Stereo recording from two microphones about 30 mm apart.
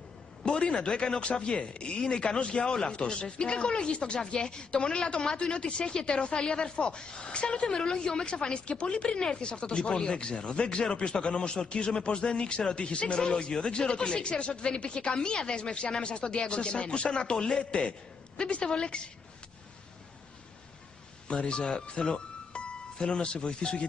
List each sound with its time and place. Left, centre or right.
0.5 s speech: left
21.5 s speech: left